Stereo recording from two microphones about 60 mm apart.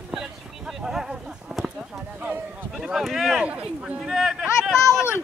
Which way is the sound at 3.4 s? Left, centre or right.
Centre.